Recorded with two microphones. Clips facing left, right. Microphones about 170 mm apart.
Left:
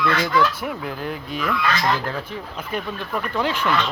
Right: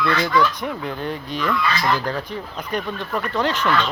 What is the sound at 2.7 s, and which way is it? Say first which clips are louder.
Speech: right 2 dB; 5° left (ahead or behind).